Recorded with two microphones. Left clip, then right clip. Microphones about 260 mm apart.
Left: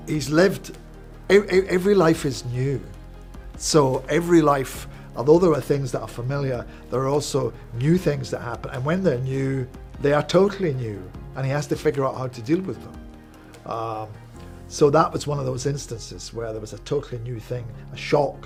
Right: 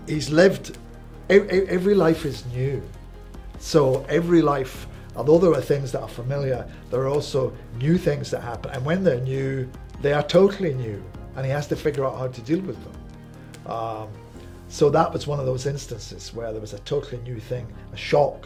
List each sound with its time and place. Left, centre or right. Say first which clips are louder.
0.0 s speech: right 2 dB; left
1.3 s a man's voice: even; left